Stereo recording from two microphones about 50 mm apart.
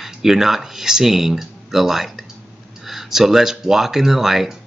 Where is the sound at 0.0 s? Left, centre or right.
Centre.